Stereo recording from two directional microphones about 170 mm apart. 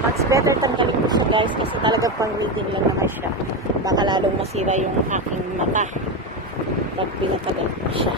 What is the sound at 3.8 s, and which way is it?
Speech, 25° right (ahead or behind).